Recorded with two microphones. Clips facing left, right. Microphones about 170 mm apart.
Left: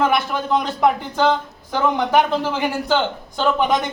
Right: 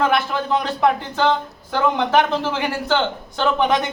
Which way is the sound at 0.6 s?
15° left (ahead or behind).